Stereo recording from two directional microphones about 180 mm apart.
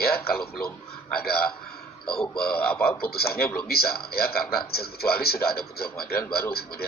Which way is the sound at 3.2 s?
60° left (ahead or behind).